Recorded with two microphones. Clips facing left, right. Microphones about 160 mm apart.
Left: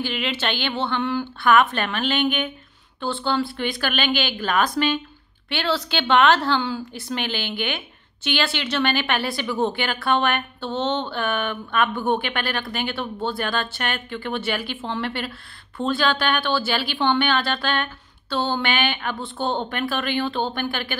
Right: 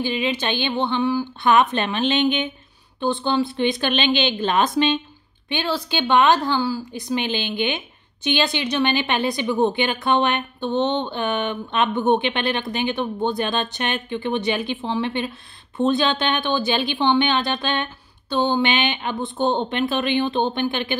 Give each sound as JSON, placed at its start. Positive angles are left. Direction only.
{"t": 0.0, "sound": "a woman's voice", "side_deg": -15}